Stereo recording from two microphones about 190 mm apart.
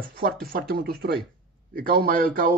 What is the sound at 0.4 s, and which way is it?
A man's voice, 50° right (ahead or behind).